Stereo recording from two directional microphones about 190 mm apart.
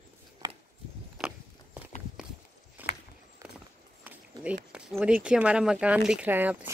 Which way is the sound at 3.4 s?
15° right (ahead or behind).